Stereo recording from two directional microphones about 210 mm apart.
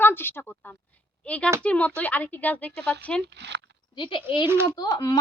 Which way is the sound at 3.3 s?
55° right (ahead or behind).